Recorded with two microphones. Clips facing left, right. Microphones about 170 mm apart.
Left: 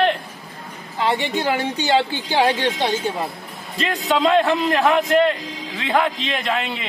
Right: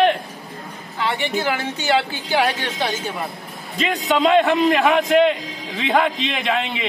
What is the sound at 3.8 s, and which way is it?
A man's voice, centre (ahead or behind).